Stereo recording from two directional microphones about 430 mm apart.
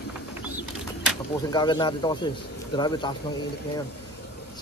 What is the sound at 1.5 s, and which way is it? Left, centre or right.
Speech, centre.